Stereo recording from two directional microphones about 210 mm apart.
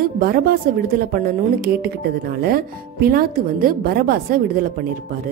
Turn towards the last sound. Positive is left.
turn(degrees=-45)  # may be behind; listen again after turning